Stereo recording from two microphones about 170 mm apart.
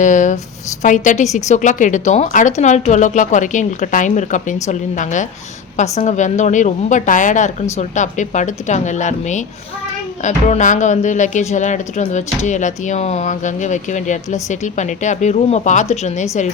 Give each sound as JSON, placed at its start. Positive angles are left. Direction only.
{"t": 0.0, "sound": "speech", "side_deg": 45}